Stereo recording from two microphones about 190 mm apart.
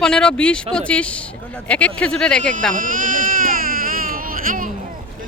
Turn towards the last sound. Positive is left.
turn(degrees=-45)  # may be behind; listen again after turning